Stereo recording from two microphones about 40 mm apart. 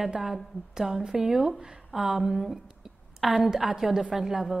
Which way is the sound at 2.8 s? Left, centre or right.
Centre.